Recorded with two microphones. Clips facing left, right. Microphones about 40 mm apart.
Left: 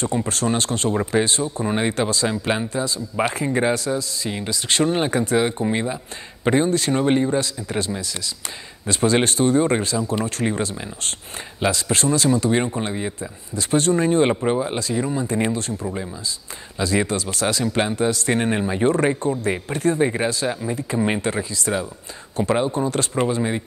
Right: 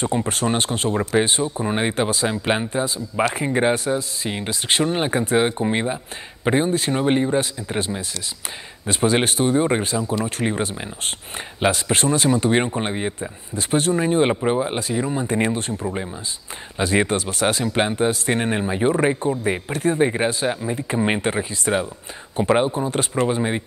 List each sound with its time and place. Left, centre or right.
0.0 s speech: right
2.7 s speech: right
4.8 s speech: centre
5.1 s speech: right
7.3 s speech: right
14.6 s speech: right
15.2 s speech: right
18.4 s speech: centre; by 23.6 s right